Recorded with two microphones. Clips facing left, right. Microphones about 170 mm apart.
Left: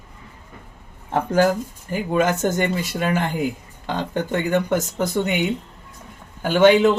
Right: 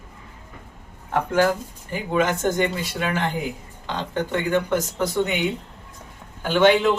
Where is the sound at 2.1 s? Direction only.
45° left (ahead or behind).